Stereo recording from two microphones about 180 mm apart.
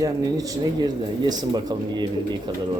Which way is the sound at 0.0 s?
20° right (ahead or behind).